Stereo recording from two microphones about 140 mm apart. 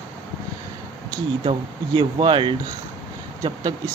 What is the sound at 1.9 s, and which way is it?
Speech, 40° right (ahead or behind).